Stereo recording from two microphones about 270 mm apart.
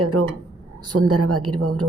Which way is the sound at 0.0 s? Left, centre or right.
Right.